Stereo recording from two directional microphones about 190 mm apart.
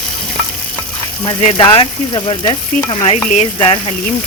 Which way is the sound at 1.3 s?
30° left (ahead or behind).